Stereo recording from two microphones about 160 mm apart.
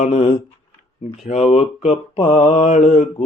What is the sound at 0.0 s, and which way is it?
Speech, 45° left (ahead or behind).